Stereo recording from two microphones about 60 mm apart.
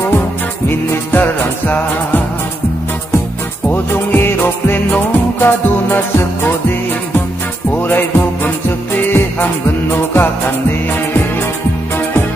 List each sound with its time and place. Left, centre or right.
0.7 s music: left
3.7 s music: left
7.7 s music: left